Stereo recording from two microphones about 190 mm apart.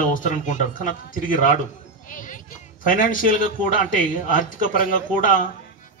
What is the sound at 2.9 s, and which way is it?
A man's voice, 45° left (ahead or behind).